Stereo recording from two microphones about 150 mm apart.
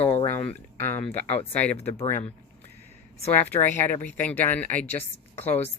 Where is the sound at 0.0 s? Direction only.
45° left (ahead or behind).